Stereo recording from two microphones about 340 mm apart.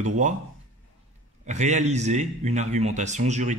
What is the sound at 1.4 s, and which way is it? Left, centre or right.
A man's voice, centre.